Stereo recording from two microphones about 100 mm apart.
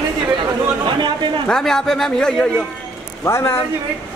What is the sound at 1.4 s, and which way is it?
Speech, 5° left (ahead or behind).